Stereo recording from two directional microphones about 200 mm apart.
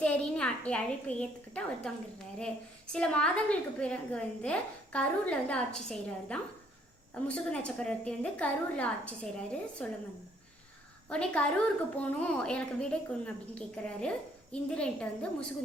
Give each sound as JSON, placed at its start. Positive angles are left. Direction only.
{"t": 0.0, "sound": "a woman's voice", "side_deg": 5}
{"t": 11.1, "sound": "a woman's voice", "side_deg": 5}